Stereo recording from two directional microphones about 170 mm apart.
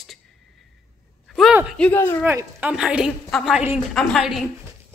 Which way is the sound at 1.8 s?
10° left (ahead or behind).